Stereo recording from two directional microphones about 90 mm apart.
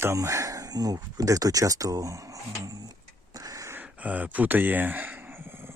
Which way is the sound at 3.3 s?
40° right (ahead or behind).